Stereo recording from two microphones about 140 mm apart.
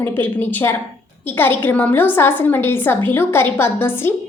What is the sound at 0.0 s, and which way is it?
A woman's voice, 15° left (ahead or behind).